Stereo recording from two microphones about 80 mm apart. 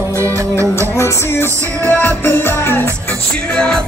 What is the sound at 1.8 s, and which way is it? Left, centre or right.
Music, left.